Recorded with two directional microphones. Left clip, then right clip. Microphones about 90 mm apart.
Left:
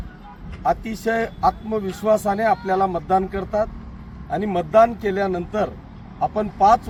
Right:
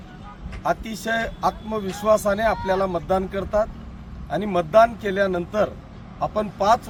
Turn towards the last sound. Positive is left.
turn(degrees=-15)  # may be behind; listen again after turning